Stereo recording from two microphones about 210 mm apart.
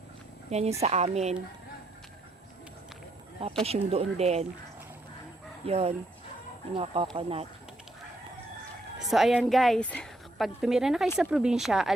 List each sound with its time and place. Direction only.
0.5 s speech: 30° right (ahead or behind)
3.6 s speech: 30° right (ahead or behind)
5.6 s speech: 30° right (ahead or behind)
9.0 s speech: centre (ahead or behind)